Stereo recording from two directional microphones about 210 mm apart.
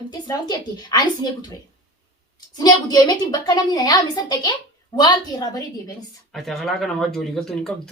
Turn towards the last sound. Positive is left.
turn(degrees=0)  # may be behind; listen again after turning